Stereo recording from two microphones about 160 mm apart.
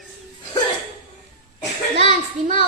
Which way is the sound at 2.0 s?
45° right (ahead or behind).